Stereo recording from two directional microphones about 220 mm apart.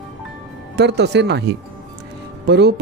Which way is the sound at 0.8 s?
50° right (ahead or behind).